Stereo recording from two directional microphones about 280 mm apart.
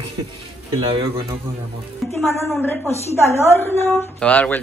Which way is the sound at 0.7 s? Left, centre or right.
Centre.